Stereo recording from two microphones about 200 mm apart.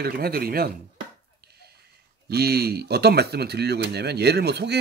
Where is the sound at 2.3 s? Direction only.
50° right (ahead or behind).